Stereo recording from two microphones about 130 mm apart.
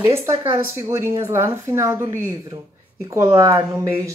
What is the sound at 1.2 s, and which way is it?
Speech, 20° right (ahead or behind).